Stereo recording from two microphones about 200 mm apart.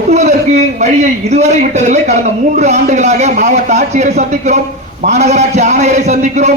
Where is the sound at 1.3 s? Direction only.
35° right (ahead or behind).